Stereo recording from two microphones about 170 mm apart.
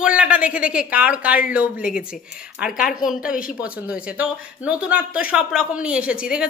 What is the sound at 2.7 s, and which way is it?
Speech, 55° left (ahead or behind).